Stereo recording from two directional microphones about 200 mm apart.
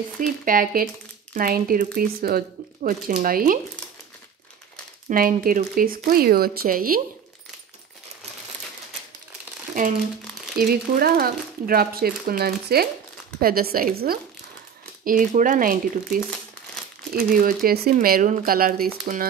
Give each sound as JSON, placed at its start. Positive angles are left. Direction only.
{"t": 0.2, "sound": "speech", "side_deg": -45}
{"t": 5.1, "sound": "speech", "side_deg": -45}
{"t": 10.6, "sound": "speech", "side_deg": -50}